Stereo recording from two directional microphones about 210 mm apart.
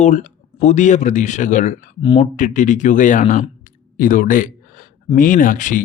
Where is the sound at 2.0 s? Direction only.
25° left (ahead or behind).